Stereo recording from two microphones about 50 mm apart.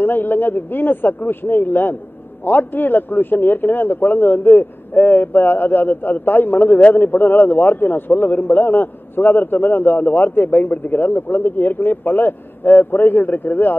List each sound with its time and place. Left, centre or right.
0.0 s a man's voice: left